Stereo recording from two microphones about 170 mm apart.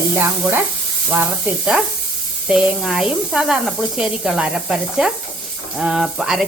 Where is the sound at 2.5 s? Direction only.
5° right (ahead or behind).